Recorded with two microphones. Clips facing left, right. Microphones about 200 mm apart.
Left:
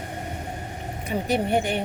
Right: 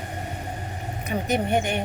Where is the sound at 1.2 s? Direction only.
35° left (ahead or behind).